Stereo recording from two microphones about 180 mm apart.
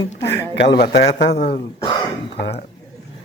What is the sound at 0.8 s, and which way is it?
Speech, 25° left (ahead or behind).